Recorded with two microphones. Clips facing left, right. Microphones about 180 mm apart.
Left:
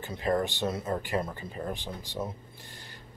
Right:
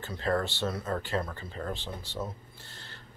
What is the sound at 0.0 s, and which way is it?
Speech, 15° left (ahead or behind).